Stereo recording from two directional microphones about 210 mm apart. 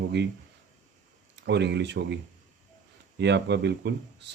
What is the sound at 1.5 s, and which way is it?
Speech, 55° right (ahead or behind).